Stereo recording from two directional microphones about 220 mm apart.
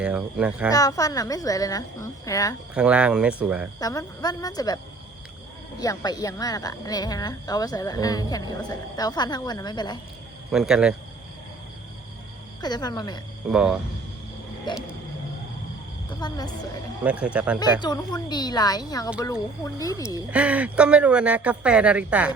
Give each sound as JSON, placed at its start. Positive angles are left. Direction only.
{"t": 0.0, "sound": "speech", "side_deg": -5}
{"t": 0.7, "sound": "speech", "side_deg": 15}
{"t": 2.7, "sound": "speech", "side_deg": -5}
{"t": 3.8, "sound": "speech", "side_deg": 15}
{"t": 5.8, "sound": "speech", "side_deg": 15}
{"t": 10.5, "sound": "speech", "side_deg": -5}
{"t": 12.6, "sound": "speech", "side_deg": 20}
{"t": 13.5, "sound": "speech", "side_deg": -5}
{"t": 14.7, "sound": "speech", "side_deg": 20}
{"t": 16.2, "sound": "speech", "side_deg": 20}
{"t": 17.0, "sound": "speech", "side_deg": -5}
{"t": 17.6, "sound": "speech", "side_deg": 20}
{"t": 20.1, "sound": "speech", "side_deg": -5}